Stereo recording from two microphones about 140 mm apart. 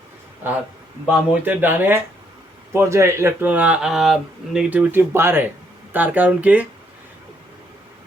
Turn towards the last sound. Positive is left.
turn(degrees=-10)  # may be behind; listen again after turning